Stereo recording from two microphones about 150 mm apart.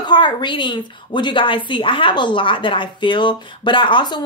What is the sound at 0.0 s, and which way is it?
A woman's voice, 30° left (ahead or behind).